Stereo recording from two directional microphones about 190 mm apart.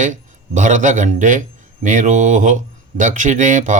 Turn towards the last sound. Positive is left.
turn(degrees=-45)  # may be behind; listen again after turning